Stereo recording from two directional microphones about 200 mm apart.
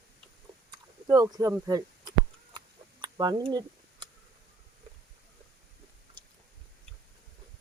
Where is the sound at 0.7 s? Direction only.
20° right (ahead or behind).